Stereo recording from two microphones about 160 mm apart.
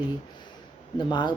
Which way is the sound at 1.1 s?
30° left (ahead or behind).